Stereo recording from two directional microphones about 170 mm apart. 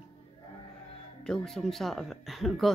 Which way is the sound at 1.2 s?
5° left (ahead or behind).